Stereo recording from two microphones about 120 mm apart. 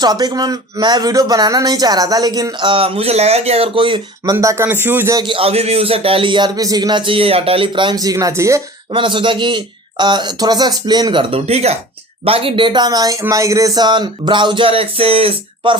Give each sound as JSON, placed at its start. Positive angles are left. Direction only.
{"t": 0.0, "sound": "speech", "side_deg": -35}
{"t": 4.2, "sound": "speech", "side_deg": -25}
{"t": 5.1, "sound": "speech", "side_deg": -45}
{"t": 8.9, "sound": "speech", "side_deg": -45}